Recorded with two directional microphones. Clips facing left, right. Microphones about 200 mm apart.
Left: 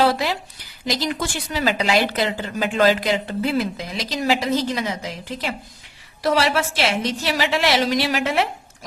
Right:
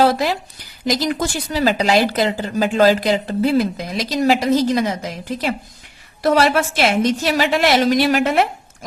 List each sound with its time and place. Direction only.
0.0 s a woman's voice: 45° right (ahead or behind)